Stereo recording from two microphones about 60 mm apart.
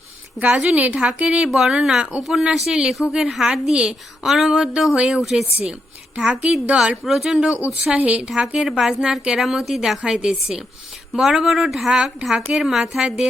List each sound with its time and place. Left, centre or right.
0.5 s a woman's voice: right
1.5 s a woman's voice: centre
6.7 s speech: centre
7.3 s a woman's voice: centre
10.0 s a woman's voice: centre